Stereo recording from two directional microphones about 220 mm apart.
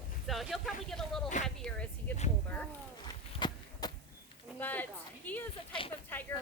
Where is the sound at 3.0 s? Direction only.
20° left (ahead or behind).